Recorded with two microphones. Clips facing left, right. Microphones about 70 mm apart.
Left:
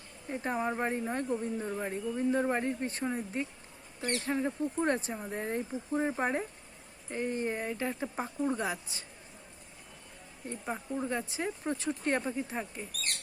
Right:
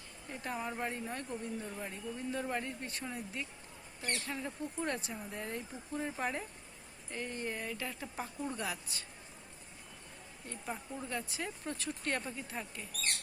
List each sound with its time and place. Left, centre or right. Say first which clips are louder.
0.3 s speech: left 7 dB; left
10.5 s speech: left 6 dB; left